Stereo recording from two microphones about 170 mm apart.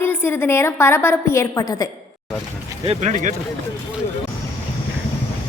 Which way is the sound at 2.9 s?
40° right (ahead or behind).